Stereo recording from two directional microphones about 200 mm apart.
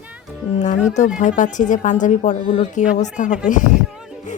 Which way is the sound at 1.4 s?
40° left (ahead or behind).